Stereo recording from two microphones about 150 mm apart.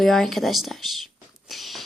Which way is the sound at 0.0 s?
Centre (ahead or behind).